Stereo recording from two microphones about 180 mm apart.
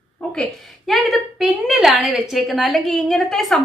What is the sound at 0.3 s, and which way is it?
A woman's voice, centre (ahead or behind).